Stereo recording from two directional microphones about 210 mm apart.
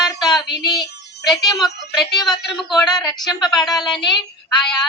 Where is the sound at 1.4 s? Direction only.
15° left (ahead or behind).